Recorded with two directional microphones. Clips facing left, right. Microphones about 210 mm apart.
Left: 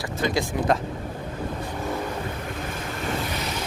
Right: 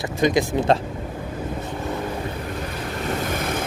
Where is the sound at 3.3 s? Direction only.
50° right (ahead or behind).